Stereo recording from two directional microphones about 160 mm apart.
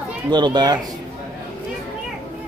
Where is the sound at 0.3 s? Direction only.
30° right (ahead or behind).